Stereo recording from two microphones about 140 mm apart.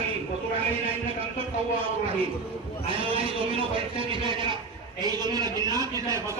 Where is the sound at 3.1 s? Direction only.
40° right (ahead or behind).